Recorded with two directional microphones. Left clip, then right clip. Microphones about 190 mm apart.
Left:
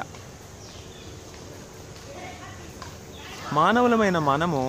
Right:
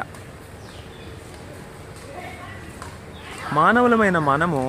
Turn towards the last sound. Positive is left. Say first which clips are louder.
# right 3 dB
turn(degrees=5)  # may be behind; listen again after turning